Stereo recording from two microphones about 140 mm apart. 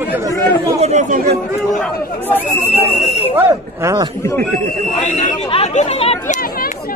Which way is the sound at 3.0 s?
50° left (ahead or behind).